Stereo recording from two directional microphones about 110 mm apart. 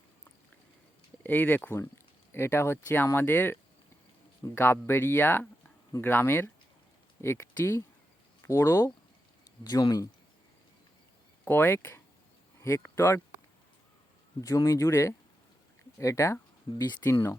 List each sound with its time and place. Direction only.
1.2 s speech: 15° left (ahead or behind); by 10.1 s 35° left (ahead or behind)
11.4 s speech: 20° left (ahead or behind)
14.4 s speech: 30° left (ahead or behind)